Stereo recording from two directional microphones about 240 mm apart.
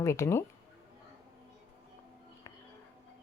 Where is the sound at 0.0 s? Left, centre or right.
Centre.